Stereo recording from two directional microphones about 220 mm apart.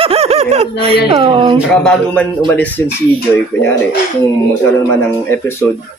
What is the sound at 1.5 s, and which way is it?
Speech, 5° left (ahead or behind).